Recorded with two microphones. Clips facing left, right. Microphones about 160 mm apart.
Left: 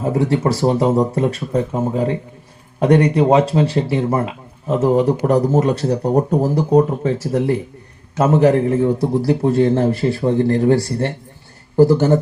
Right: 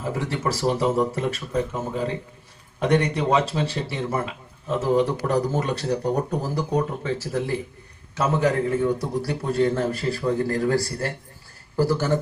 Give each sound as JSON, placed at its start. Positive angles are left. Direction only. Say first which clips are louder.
{"t": 0.0, "sound": "a man's voice", "louder": "left 9 dB", "side_deg": 30}